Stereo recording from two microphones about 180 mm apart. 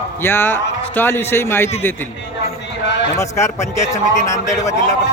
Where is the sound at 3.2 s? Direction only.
15° left (ahead or behind).